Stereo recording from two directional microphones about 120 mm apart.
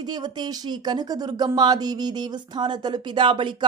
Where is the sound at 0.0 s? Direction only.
35° right (ahead or behind).